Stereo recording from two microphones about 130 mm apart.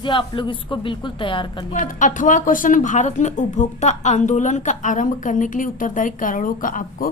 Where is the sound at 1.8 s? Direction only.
80° left.